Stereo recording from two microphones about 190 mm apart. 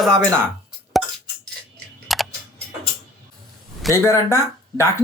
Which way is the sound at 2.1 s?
Centre (ahead or behind).